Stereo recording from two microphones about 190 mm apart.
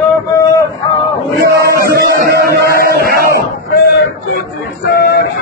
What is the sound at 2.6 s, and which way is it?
Chant, 55° left (ahead or behind).